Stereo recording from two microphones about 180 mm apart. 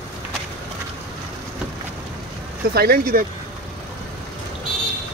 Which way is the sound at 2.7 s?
60° right (ahead or behind).